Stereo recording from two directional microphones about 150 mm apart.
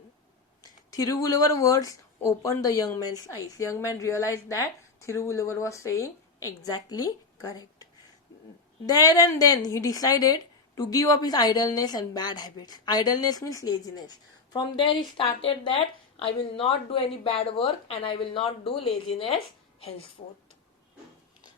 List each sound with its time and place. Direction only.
0.6 s speech: 25° left (ahead or behind)
8.9 s speech: 25° left (ahead or behind)